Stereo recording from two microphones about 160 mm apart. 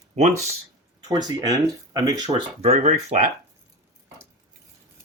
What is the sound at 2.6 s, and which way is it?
Speech, 45° right (ahead or behind).